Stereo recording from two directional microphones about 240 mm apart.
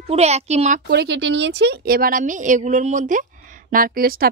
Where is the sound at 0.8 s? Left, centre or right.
Right.